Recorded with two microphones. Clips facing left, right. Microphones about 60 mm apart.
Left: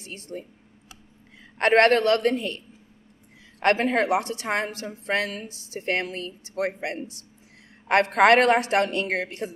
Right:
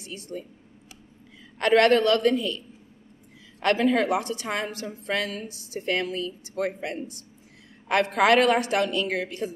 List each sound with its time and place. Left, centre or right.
0.0 s speech: left
1.6 s a woman's voice: left
7.9 s a woman's voice: left